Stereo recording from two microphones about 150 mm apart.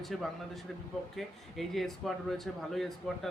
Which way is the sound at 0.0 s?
Centre (ahead or behind).